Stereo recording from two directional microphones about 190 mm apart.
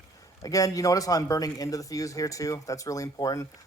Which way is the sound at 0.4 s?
20° left (ahead or behind).